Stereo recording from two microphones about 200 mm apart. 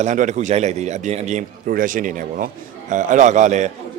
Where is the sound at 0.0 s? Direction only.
35° right (ahead or behind).